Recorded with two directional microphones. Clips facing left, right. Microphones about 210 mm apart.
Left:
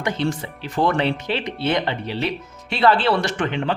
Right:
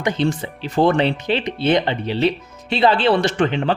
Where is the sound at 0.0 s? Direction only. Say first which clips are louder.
Right 3 dB; 20° right (ahead or behind).